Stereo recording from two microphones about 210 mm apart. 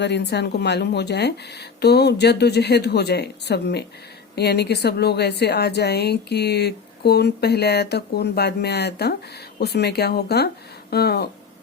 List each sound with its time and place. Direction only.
0.0 s a woman's voice: 55° left (ahead or behind)